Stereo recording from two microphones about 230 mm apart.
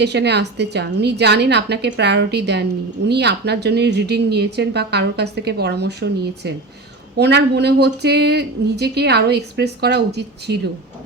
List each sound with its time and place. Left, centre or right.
0.0 s speech: right